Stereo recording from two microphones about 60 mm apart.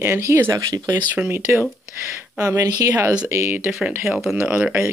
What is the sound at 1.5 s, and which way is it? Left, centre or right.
Speech, right.